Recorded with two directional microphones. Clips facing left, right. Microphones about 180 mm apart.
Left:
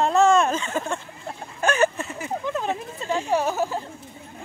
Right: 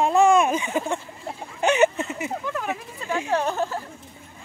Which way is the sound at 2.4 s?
25° left (ahead or behind).